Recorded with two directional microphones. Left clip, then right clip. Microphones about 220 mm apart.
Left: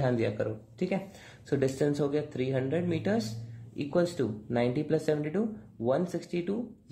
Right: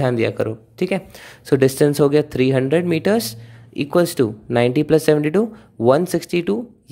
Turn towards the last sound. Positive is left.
turn(degrees=-45)  # may be behind; listen again after turning